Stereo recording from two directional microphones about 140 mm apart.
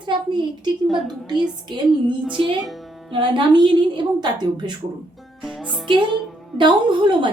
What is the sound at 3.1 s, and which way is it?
A woman's voice, 35° right (ahead or behind).